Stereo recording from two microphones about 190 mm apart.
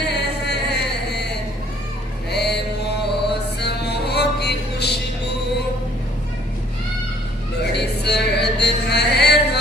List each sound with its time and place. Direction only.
0.0 s a sound: 60° left (ahead or behind)
3.1 s music: 60° left (ahead or behind)
7.7 s music: 60° left (ahead or behind)